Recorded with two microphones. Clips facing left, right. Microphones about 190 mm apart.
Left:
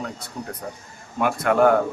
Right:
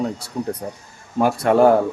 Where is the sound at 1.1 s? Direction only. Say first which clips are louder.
Right 4 dB; 35° right (ahead or behind).